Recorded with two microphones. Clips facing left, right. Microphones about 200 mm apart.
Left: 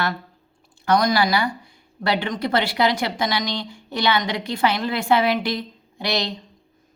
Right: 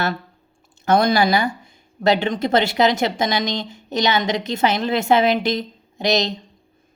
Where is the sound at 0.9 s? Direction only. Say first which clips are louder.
Right 3 dB; 25° right (ahead or behind).